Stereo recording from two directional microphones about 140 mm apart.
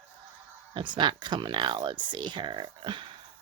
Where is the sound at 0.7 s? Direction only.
35° right (ahead or behind).